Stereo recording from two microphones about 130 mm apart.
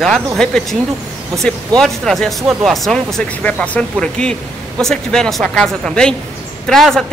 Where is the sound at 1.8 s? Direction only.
Centre (ahead or behind).